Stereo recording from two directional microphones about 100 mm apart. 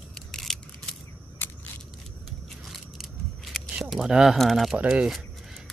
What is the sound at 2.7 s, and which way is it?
Scissors, centre (ahead or behind).